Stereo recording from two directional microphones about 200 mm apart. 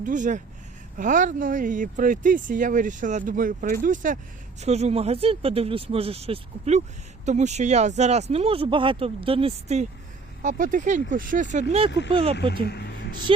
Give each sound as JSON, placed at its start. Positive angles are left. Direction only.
{"t": 0.0, "sound": "speech", "side_deg": -40}
{"t": 11.9, "sound": "speech", "side_deg": 60}
{"t": 12.1, "sound": "speech", "side_deg": -30}
{"t": 12.6, "sound": "speech", "side_deg": 55}